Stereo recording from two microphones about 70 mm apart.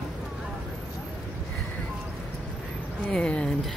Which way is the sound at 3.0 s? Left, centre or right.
Centre.